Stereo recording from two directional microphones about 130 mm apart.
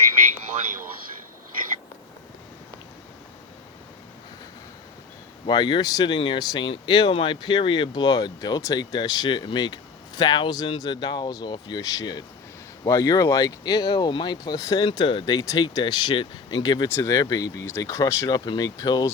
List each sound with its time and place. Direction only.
5.5 s speech: 35° left (ahead or behind)
14.8 s speech: 40° left (ahead or behind)